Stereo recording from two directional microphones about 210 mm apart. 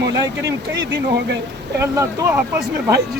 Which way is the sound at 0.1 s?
15° right (ahead or behind).